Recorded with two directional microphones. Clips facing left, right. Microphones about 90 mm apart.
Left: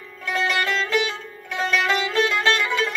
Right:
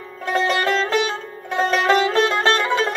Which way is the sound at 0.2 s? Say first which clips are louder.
Right 4 dB; 35° right (ahead or behind).